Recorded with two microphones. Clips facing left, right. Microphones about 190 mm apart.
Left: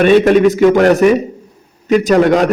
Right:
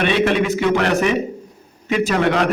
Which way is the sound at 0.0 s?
45° left (ahead or behind).